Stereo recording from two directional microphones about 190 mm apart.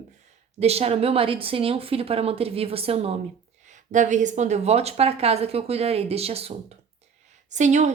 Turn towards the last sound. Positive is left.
turn(degrees=-40)  # may be behind; listen again after turning